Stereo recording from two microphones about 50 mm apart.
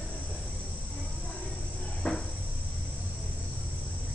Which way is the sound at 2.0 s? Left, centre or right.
Left.